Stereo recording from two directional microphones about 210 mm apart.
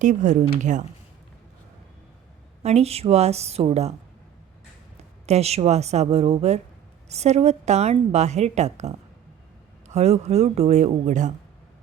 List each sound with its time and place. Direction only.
0.0 s a woman's voice: 35° right (ahead or behind)
2.6 s a woman's voice: 30° right (ahead or behind)
5.2 s a woman's voice: 30° right (ahead or behind)